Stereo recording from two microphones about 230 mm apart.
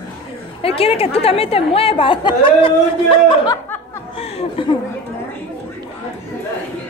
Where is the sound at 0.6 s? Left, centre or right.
Left.